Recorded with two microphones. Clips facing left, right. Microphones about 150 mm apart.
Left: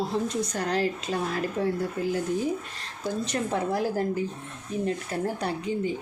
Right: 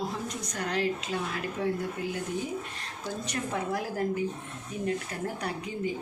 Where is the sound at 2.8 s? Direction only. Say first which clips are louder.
Left 5 dB; 30° left (ahead or behind).